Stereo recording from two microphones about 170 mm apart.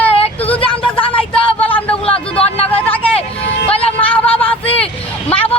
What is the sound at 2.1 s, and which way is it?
Speech, 35° left (ahead or behind).